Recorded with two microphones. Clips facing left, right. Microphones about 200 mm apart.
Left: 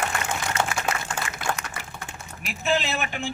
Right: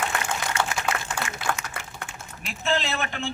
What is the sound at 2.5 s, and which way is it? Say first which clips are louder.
Speech: left 1 dB; 15° left (ahead or behind).